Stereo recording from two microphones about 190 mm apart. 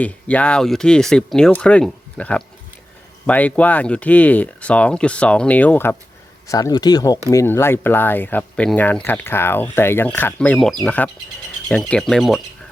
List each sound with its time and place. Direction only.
0.0 s speech: 5° left (ahead or behind)